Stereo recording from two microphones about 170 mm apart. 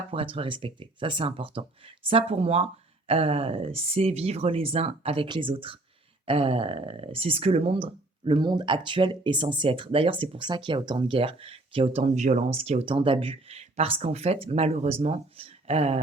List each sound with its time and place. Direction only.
0.1 s speech: 30° right (ahead or behind)